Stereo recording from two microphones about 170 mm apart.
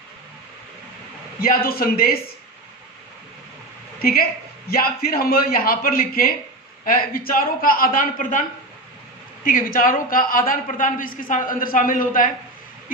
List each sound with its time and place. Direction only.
1.4 s a man's voice: 60° left (ahead or behind)
4.0 s a man's voice: 60° left (ahead or behind)